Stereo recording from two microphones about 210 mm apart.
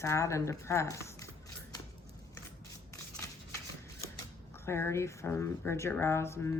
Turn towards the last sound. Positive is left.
turn(degrees=10)  # may be behind; listen again after turning